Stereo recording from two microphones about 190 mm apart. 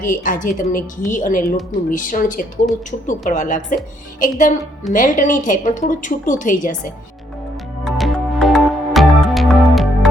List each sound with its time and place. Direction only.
0.0 s a woman's voice: 45° left (ahead or behind)
7.9 s music: centre (ahead or behind)